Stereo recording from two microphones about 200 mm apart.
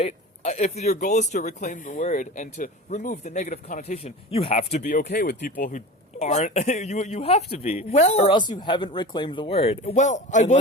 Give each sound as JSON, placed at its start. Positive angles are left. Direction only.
{"t": 0.0, "sound": "speech", "side_deg": 35}